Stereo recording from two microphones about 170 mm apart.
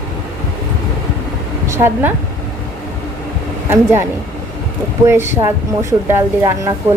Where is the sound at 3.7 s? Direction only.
15° right (ahead or behind).